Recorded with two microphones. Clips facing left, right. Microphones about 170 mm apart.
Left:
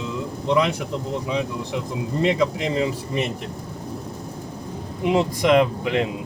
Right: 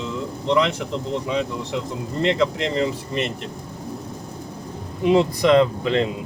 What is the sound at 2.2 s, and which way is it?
Speech, 10° left (ahead or behind).